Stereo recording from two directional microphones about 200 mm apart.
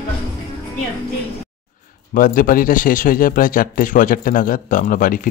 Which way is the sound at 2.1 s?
45° left (ahead or behind).